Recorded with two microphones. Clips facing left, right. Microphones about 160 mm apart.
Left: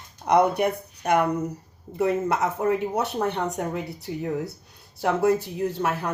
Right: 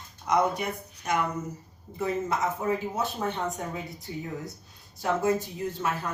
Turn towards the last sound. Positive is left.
turn(degrees=65)  # may be behind; listen again after turning